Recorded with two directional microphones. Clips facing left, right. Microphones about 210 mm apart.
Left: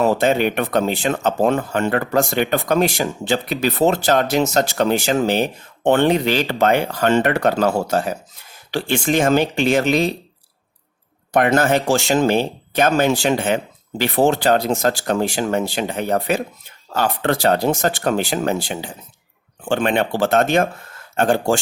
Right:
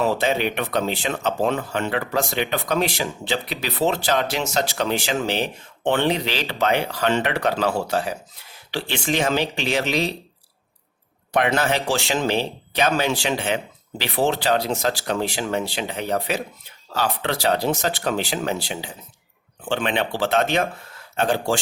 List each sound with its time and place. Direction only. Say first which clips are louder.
0.0 s speech: left 5 dB; 50° left (ahead or behind)
11.3 s speech: left 5 dB; 45° left (ahead or behind)